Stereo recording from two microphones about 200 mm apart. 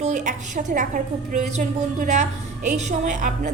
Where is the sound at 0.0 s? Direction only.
40° right (ahead or behind).